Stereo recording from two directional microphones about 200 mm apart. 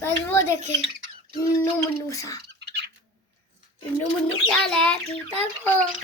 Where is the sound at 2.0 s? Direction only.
15° left (ahead or behind).